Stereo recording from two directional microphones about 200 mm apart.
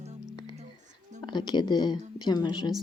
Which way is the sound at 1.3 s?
20° left (ahead or behind).